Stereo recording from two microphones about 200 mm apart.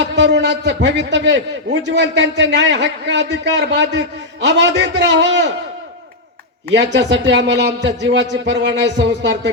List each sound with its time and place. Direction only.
0.0 s a man's voice: 60° right (ahead or behind)
6.7 s a man's voice: 60° right (ahead or behind)